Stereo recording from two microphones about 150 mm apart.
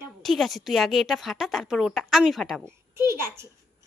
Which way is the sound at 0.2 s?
Centre (ahead or behind).